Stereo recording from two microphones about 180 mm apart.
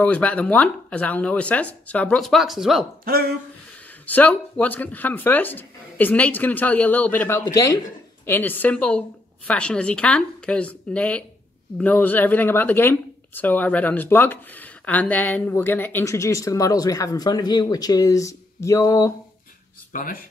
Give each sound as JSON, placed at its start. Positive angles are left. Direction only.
{"t": 0.0, "sound": "speech", "side_deg": 10}
{"t": 3.1, "sound": "speech", "side_deg": -60}
{"t": 4.0, "sound": "speech", "side_deg": 10}
{"t": 19.9, "sound": "speech", "side_deg": 45}